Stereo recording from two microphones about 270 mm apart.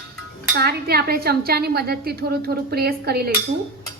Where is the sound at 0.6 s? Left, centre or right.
Right.